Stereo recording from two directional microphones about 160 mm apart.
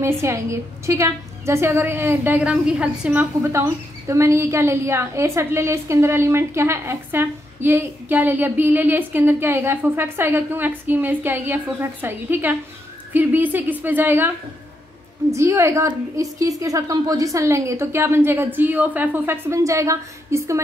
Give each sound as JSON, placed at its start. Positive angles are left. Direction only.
{"t": 0.0, "sound": "a woman's voice", "side_deg": -15}
{"t": 15.3, "sound": "a woman's voice", "side_deg": -15}